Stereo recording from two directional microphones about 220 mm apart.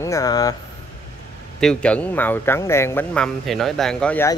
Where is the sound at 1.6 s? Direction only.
5° left (ahead or behind).